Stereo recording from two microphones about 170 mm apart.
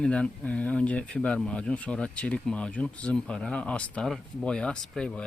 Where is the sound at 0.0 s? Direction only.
5° left (ahead or behind).